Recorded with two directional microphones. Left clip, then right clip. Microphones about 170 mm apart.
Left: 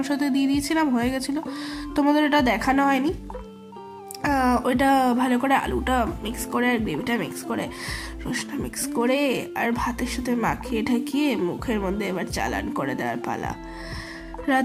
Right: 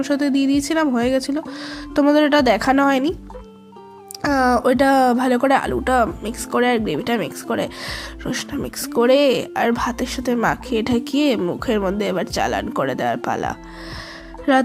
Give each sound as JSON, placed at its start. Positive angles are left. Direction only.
{"t": 0.0, "sound": "speech", "side_deg": -25}
{"t": 4.2, "sound": "speech", "side_deg": -25}